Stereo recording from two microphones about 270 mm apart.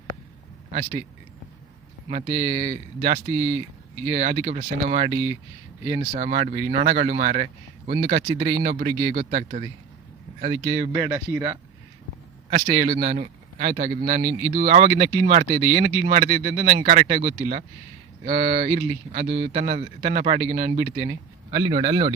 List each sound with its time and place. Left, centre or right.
0.7 s speech: right
2.0 s a man's voice: right
5.1 s speech: centre
6.1 s a man's voice: right
8.9 s speech: centre
9.1 s a man's voice: right
10.9 s speech: centre
12.5 s a man's voice: right
21.5 s speech: centre